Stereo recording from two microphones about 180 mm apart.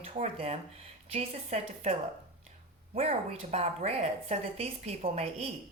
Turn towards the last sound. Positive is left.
turn(degrees=-35)  # may be behind; listen again after turning